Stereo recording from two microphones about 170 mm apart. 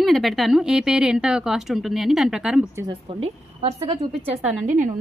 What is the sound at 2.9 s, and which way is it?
A woman's voice, 35° right (ahead or behind).